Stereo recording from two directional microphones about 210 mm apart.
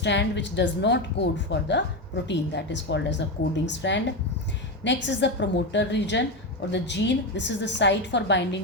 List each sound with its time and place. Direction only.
0.0 s a woman's voice: 55° left (ahead or behind)